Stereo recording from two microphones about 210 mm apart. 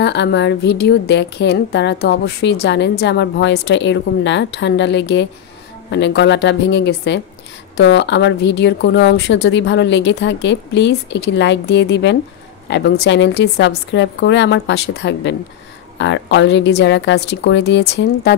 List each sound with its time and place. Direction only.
0.0 s a woman's voice: 55° left (ahead or behind)